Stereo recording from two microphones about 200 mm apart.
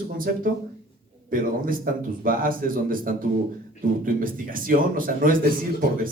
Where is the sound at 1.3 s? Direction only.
45° right (ahead or behind).